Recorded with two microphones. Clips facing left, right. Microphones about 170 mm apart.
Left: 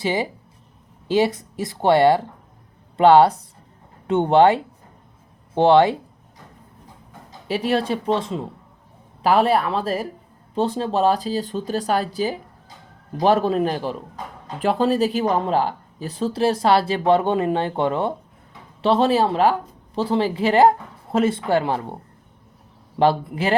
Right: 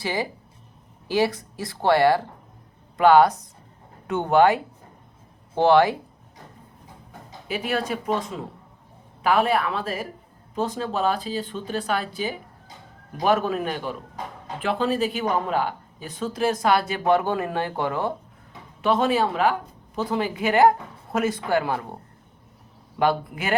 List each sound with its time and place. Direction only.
0.0 s speech: 20° left (ahead or behind)
7.4 s speech: 35° left (ahead or behind)
23.0 s speech: 30° left (ahead or behind)